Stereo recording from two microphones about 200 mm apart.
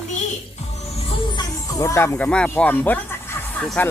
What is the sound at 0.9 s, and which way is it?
Music, 25° left (ahead or behind).